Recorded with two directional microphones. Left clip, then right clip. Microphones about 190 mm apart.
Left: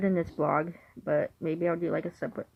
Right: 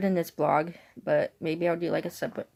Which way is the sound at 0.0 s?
30° right (ahead or behind).